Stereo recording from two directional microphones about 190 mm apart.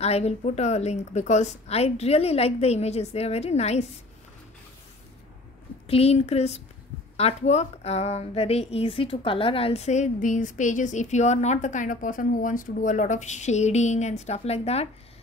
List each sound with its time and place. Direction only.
0.0 s speech: 35° left (ahead or behind)
5.9 s speech: 30° left (ahead or behind)